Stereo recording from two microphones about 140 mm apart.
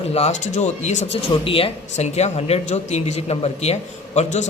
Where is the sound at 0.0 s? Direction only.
45° left (ahead or behind).